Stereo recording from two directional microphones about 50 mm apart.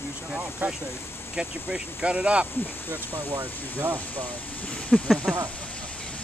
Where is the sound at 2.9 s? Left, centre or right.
Right.